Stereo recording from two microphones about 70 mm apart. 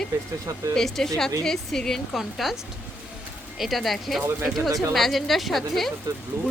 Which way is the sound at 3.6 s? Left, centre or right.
Centre.